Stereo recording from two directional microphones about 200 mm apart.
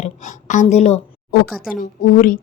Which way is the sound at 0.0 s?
40° left (ahead or behind).